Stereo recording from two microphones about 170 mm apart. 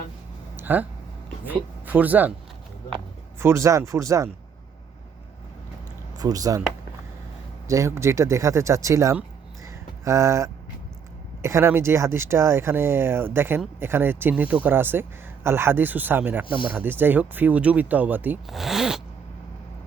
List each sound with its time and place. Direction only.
0.5 s a sound: 10° right (ahead or behind)
1.5 s speech: 10° right (ahead or behind)
3.4 s speech: 15° right (ahead or behind)
6.1 s speech: 20° right (ahead or behind)
7.7 s speech: 15° right (ahead or behind)
9.6 s a sound: 20° right (ahead or behind)
11.4 s speech: 15° right (ahead or behind)